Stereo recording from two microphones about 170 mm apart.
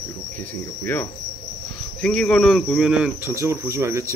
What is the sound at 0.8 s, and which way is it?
Cricket, 10° left (ahead or behind).